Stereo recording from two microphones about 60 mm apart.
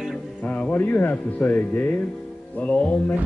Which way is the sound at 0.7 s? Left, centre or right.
Left.